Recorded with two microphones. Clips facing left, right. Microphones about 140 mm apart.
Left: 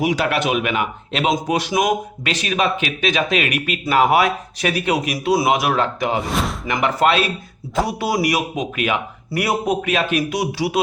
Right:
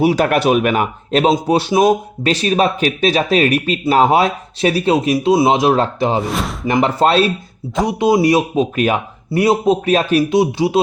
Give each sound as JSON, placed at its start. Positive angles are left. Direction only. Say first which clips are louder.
{"t": 0.0, "sound": "speech", "louder": "right 6 dB", "side_deg": -35}
{"t": 6.2, "sound": "speech", "louder": "right 1 dB", "side_deg": 0}
{"t": 6.7, "sound": "speech", "louder": "right 4 dB", "side_deg": -30}
{"t": 7.9, "sound": "speech", "louder": "right 10 dB", "side_deg": -20}
{"t": 9.3, "sound": "speech", "louder": "right 7 dB", "side_deg": -25}
{"t": 9.8, "sound": "speech", "louder": "right 6 dB", "side_deg": -35}